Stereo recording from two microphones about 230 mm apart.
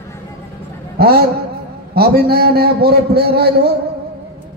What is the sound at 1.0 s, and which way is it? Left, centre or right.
A man's voice, right.